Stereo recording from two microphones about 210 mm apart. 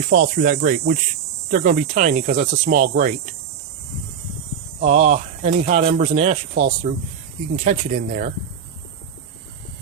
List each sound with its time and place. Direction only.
0.1 s speech: 40° right (ahead or behind)
4.8 s speech: 30° right (ahead or behind)